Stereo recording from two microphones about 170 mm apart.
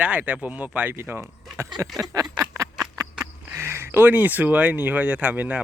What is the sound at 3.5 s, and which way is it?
Speech, 15° right (ahead or behind).